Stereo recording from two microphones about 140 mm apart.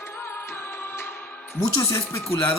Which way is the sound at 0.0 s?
15° left (ahead or behind).